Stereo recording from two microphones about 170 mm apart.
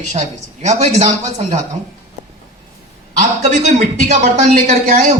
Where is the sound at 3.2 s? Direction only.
45° right (ahead or behind).